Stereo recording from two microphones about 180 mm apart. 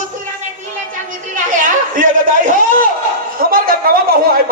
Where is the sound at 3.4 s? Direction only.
55° right (ahead or behind).